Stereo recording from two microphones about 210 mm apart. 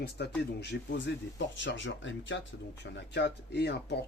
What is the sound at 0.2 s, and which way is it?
Speech, 50° left (ahead or behind).